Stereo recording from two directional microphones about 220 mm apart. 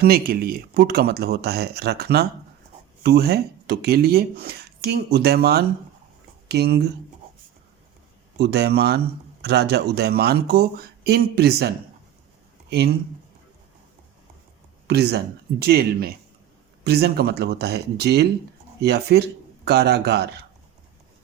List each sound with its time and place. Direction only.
0.0 s speech: 45° right (ahead or behind)
8.4 s speech: 50° right (ahead or behind)
14.8 s a man's voice: 50° right (ahead or behind)